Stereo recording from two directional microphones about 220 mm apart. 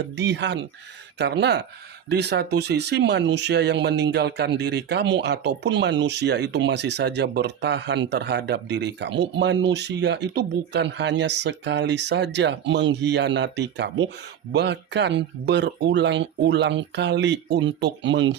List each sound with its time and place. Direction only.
0.2 s speech: 50° right (ahead or behind)